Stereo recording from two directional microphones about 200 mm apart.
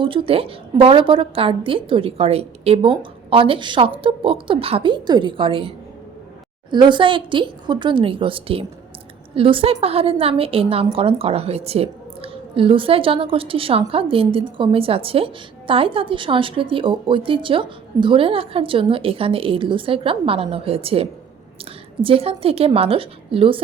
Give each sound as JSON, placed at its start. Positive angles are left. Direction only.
{"t": 0.0, "sound": "a woman's voice", "side_deg": -25}